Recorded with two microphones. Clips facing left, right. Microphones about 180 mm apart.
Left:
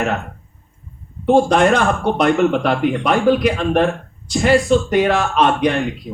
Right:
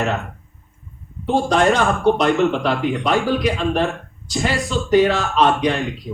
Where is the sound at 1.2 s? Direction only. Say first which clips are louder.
Left 4 dB; 55° left (ahead or behind).